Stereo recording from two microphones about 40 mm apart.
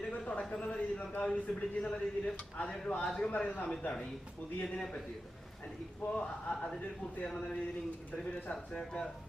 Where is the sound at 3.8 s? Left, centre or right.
Left.